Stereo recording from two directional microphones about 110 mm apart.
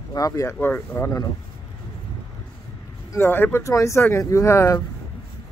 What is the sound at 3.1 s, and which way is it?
Speech, 20° left (ahead or behind).